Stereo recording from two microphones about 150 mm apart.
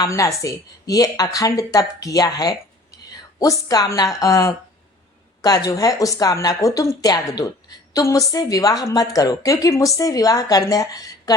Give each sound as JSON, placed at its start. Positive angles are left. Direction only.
{"t": 0.0, "sound": "a woman's voice", "side_deg": 20}